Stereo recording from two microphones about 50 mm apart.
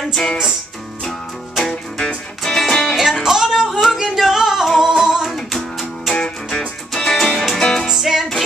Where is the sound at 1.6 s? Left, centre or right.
Centre.